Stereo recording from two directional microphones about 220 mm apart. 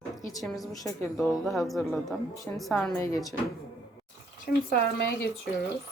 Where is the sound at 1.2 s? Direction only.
Centre (ahead or behind).